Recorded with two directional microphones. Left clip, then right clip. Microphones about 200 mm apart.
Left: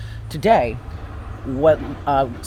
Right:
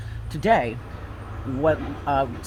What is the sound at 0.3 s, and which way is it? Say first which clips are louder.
Speech: left 4 dB; 35° left (ahead or behind).